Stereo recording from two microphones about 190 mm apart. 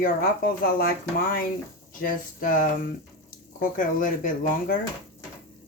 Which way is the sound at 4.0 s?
45° left (ahead or behind).